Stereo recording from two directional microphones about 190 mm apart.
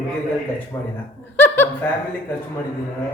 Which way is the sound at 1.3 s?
10° left (ahead or behind).